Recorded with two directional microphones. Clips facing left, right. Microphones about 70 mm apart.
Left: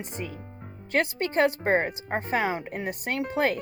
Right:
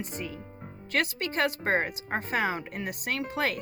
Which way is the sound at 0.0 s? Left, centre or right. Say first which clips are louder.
Even; left.